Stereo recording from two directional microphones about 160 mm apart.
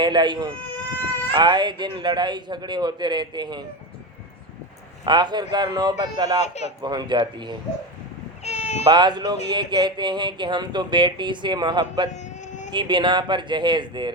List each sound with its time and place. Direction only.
0.0 s speech: 30° right (ahead or behind)
5.0 s speech: 30° right (ahead or behind)
6.4 s speech: 45° left (ahead or behind)
6.8 s speech: 30° right (ahead or behind)
8.4 s a sound: 45° left (ahead or behind)
8.8 s speech: 30° right (ahead or behind)
12.1 s a sound: 50° left (ahead or behind)
12.7 s speech: 30° right (ahead or behind)